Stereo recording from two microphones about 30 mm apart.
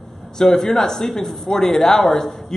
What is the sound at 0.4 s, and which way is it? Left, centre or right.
A man's voice, centre.